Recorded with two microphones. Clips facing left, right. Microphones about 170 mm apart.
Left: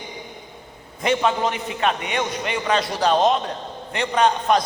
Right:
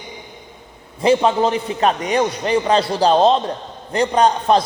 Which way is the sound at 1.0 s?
30° right (ahead or behind).